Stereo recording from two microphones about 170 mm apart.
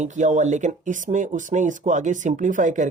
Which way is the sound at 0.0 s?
45° right (ahead or behind).